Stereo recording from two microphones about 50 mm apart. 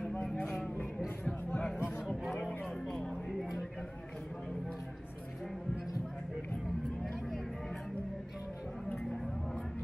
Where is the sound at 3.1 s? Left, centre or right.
Centre.